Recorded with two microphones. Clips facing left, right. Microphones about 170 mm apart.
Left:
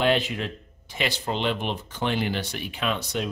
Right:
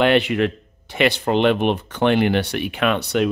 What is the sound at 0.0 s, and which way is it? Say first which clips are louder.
Speech: right 7 dB; 70° right (ahead or behind).